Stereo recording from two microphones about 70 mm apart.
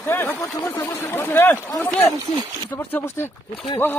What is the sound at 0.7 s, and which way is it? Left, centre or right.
Speech, left.